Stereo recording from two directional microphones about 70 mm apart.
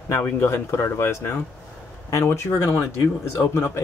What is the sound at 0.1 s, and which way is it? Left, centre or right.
Speech, left.